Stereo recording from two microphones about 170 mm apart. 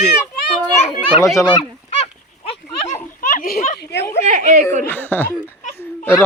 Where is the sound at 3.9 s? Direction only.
70° left (ahead or behind).